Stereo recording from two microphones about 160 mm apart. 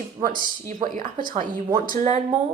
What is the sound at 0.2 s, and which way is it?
A woman's voice, 60° right (ahead or behind).